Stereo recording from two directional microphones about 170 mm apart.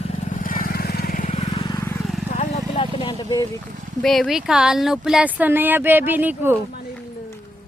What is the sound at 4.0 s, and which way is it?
Speech, centre (ahead or behind).